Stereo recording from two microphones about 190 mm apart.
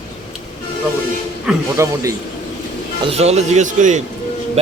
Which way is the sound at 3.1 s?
35° right (ahead or behind).